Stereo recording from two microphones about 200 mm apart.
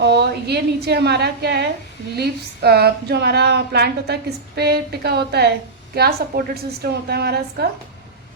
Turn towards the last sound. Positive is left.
turn(degrees=-55)  # may be behind; listen again after turning